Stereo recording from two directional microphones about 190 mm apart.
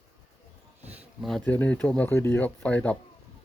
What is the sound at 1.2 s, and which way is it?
Speech, 5° left (ahead or behind).